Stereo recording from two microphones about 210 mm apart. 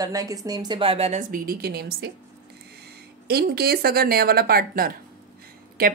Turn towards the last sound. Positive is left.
turn(degrees=-45)  # may be behind; listen again after turning